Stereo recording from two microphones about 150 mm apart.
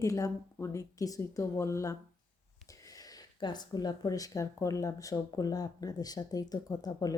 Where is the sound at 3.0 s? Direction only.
30° left (ahead or behind).